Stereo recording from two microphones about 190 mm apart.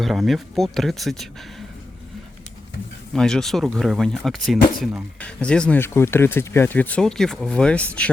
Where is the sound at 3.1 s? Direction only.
5° left (ahead or behind).